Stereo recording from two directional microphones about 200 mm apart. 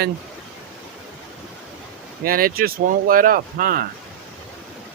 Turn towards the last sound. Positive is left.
turn(degrees=-45)  # may be behind; listen again after turning